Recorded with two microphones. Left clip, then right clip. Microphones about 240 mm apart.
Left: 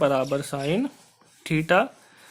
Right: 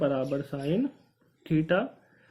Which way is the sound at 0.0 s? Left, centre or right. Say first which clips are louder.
Left 6 dB; left.